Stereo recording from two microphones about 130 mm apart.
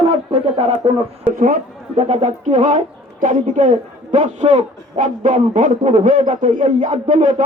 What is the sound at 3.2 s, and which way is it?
A man's voice, 80° right.